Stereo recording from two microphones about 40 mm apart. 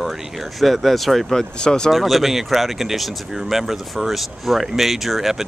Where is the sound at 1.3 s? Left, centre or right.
Left.